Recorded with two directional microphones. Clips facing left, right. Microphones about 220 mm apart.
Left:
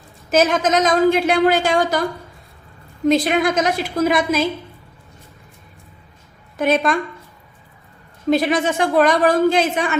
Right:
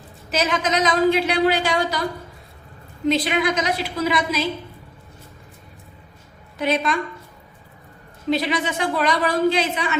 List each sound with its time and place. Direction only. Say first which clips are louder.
0.3 s a woman's voice: left 6 dB; 45° left (ahead or behind)
3.1 s a woman's voice: left 4 dB; 45° left (ahead or behind)
6.6 s a woman's voice: left 4 dB; 50° left (ahead or behind)
8.3 s a woman's voice: left 5 dB; 50° left (ahead or behind)